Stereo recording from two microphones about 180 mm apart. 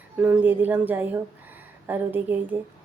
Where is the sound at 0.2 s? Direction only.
10° right (ahead or behind).